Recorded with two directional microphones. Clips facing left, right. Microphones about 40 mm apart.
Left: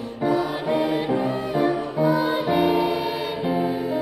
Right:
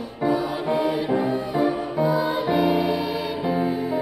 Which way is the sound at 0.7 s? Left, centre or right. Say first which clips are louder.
Left 1 dB; left.